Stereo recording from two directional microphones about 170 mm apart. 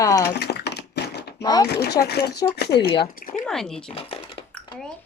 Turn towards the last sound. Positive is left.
turn(degrees=35)  # may be behind; listen again after turning